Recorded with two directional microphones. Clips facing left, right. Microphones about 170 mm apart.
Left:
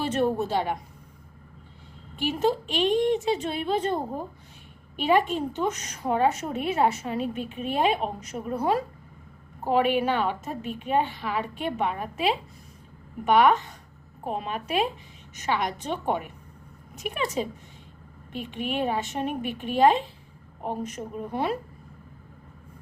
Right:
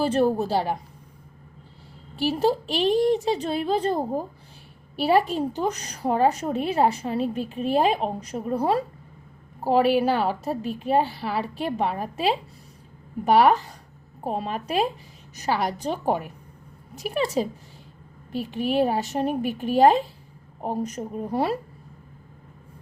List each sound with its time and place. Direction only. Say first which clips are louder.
0.0 s a woman's voice: right 4 dB; 35° right (ahead or behind)
2.1 s a woman's voice: right 2 dB; 35° right (ahead or behind)